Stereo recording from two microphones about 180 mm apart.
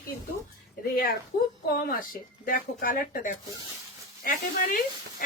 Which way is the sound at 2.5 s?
50° left (ahead or behind).